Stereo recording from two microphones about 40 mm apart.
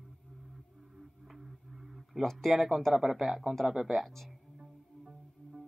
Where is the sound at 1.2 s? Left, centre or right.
Centre.